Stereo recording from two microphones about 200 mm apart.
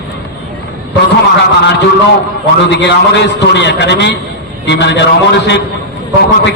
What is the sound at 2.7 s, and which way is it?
A man's voice, 60° left (ahead or behind).